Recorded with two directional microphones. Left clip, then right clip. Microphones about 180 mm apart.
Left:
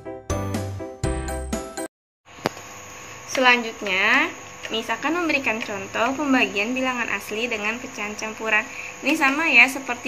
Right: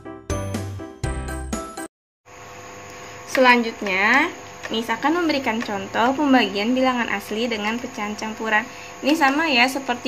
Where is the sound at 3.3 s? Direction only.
60° right (ahead or behind).